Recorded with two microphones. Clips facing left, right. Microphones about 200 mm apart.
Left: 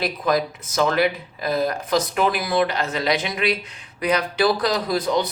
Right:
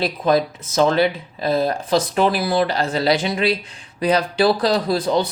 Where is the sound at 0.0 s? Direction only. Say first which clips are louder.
Right 4 dB; 30° right (ahead or behind).